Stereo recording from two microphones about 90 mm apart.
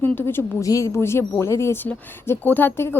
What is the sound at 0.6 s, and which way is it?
A woman's voice, 35° left (ahead or behind).